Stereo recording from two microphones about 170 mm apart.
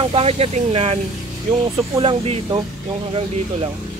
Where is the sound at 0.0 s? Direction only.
35° right (ahead or behind).